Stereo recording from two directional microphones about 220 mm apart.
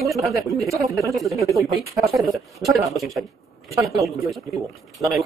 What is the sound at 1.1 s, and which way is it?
Speech, centre (ahead or behind).